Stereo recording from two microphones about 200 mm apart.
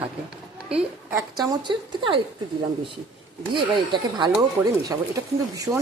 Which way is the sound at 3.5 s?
20° right (ahead or behind).